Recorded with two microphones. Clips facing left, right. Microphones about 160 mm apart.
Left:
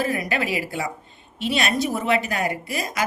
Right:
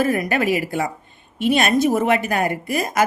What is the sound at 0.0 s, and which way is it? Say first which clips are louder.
Speech: right 5 dB; 50° right (ahead or behind).